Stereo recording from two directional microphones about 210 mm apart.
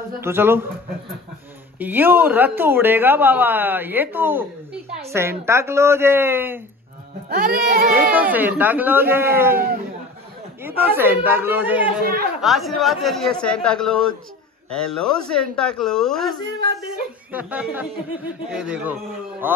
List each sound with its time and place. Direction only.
0.2 s speech: 10° right (ahead or behind)
1.8 s speech: 10° right (ahead or behind)
7.2 s music: 45° right (ahead or behind)
8.1 s speech: 10° right (ahead or behind)
10.6 s a woman's voice: 10° right (ahead or behind)